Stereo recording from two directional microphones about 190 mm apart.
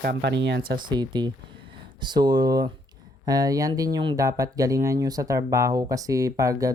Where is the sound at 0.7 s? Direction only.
25° right (ahead or behind).